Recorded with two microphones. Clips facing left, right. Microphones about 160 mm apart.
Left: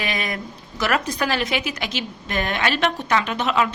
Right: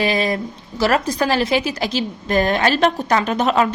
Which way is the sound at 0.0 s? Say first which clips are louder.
Right 8 dB; 30° right (ahead or behind).